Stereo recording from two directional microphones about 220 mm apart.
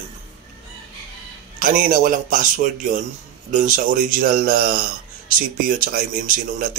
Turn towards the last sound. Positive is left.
turn(degrees=-40)  # may be behind; listen again after turning